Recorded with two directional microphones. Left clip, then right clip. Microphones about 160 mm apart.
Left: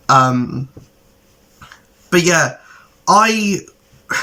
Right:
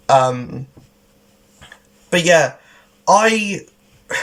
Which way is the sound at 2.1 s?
15° right (ahead or behind).